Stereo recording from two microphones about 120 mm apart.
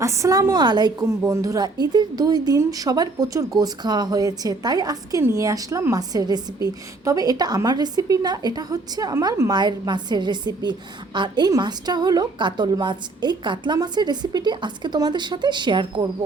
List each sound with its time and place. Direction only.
0.0 s a woman's voice: 25° right (ahead or behind)
1.0 s a woman's voice: 25° right (ahead or behind)